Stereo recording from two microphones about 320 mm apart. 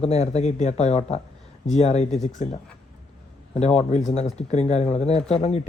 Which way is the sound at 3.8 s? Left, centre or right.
Left.